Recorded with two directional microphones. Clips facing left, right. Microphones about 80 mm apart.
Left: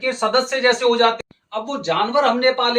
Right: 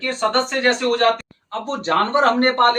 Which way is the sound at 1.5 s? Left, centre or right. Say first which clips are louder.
Even; right.